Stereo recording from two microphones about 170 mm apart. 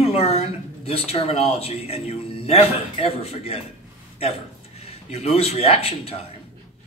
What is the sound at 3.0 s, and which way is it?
Speech, 35° left (ahead or behind).